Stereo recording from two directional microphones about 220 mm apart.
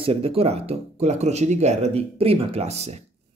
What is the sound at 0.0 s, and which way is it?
Speech, 25° right (ahead or behind).